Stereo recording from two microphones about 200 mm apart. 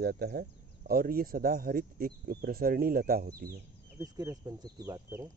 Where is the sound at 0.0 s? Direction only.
50° right (ahead or behind).